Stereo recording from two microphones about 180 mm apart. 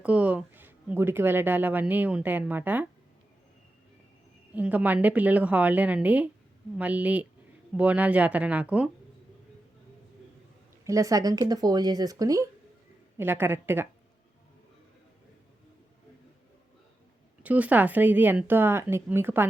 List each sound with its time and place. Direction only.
0.0 s speech: 5° right (ahead or behind)
4.5 s speech: 10° right (ahead or behind)
10.8 s speech: 15° right (ahead or behind)
17.4 s speech: 10° right (ahead or behind)